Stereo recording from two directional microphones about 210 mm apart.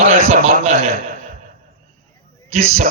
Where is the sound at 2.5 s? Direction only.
30° right (ahead or behind).